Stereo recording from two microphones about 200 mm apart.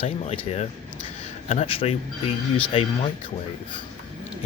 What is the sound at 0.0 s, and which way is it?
Speech, 35° left (ahead or behind).